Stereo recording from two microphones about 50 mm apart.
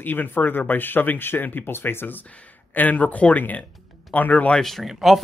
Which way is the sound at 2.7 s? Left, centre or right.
Left.